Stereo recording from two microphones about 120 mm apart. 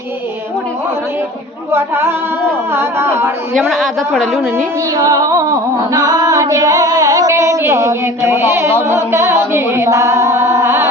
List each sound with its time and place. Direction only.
1.7 s music: 20° right (ahead or behind)
3.5 s a woman's voice: centre (ahead or behind)
4.5 s music: 25° right (ahead or behind)